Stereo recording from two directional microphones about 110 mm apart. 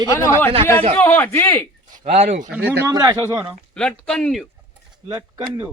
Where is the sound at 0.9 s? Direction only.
15° left (ahead or behind).